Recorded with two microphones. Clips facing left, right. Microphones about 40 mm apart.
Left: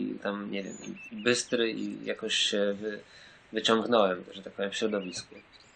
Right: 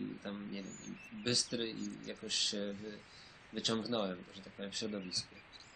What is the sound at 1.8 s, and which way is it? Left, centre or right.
Speech, left.